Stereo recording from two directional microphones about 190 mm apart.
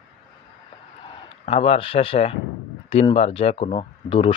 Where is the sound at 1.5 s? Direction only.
30° left (ahead or behind).